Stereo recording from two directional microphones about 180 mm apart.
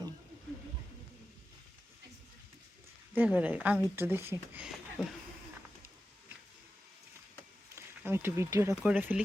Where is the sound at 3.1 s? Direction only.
10° right (ahead or behind).